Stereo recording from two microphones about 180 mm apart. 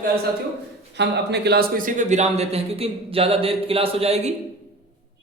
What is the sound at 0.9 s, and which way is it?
A man's voice, 70° right (ahead or behind).